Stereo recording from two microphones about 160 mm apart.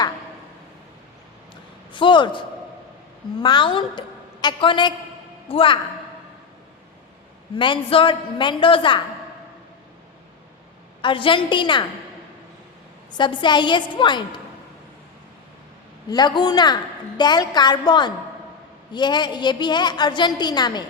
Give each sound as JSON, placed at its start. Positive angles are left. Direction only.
{"t": 1.9, "sound": "a man's voice", "side_deg": 30}
{"t": 3.4, "sound": "a woman's voice", "side_deg": 30}
{"t": 7.5, "sound": "a woman's voice", "side_deg": 30}
{"t": 11.0, "sound": "a woman's voice", "side_deg": 35}
{"t": 13.1, "sound": "a woman's voice", "side_deg": 30}
{"t": 16.0, "sound": "a woman's voice", "side_deg": 25}